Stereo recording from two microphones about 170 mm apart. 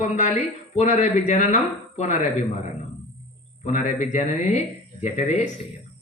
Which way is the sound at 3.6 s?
45° left (ahead or behind).